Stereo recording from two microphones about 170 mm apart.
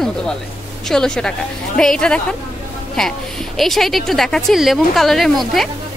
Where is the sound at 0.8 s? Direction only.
5° left (ahead or behind).